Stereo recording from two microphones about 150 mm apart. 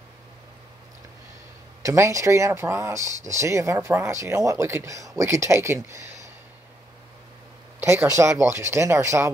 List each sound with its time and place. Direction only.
1.8 s speech: 20° right (ahead or behind)
7.8 s speech: 20° right (ahead or behind)